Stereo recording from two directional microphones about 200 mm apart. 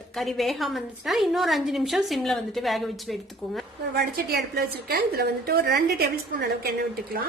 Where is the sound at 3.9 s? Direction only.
50° right (ahead or behind).